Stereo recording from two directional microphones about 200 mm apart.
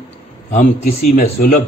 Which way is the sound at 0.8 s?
40° left (ahead or behind).